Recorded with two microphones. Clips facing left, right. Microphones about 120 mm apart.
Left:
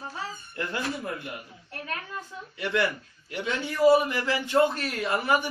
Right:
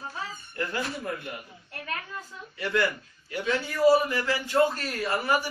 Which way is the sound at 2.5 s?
20° left (ahead or behind).